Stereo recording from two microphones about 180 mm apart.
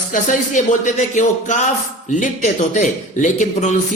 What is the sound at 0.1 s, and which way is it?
Speech, 45° left (ahead or behind).